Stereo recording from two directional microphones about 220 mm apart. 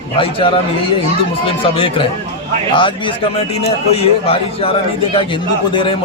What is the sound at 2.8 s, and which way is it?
A man's voice, 20° left (ahead or behind).